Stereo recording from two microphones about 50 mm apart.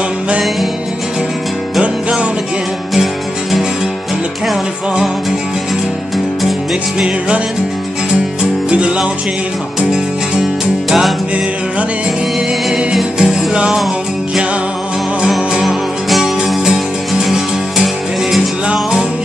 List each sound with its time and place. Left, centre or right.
1.8 s music: centre
6.1 s music: centre
7.0 s music: right
10.9 s music: centre
12.7 s music: centre
15.6 s music: centre